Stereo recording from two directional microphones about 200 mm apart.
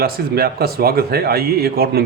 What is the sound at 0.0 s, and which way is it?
A man's voice, 50° right (ahead or behind).